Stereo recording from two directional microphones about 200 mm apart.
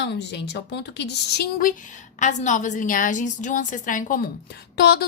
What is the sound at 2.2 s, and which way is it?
A woman's voice, 35° left (ahead or behind).